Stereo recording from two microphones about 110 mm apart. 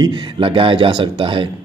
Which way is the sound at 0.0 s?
50° right (ahead or behind).